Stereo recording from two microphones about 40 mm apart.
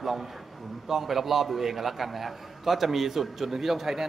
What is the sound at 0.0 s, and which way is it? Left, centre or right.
A man's voice, centre.